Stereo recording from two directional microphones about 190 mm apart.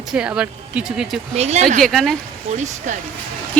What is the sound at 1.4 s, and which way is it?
Speech, 35° right (ahead or behind).